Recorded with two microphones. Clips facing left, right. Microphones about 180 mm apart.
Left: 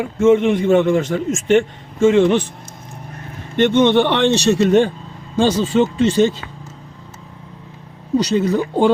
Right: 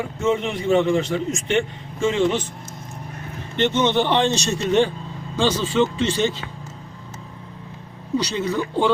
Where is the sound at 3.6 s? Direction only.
55° left (ahead or behind).